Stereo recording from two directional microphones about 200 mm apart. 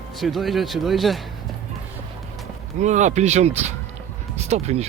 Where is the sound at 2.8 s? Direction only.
35° right (ahead or behind).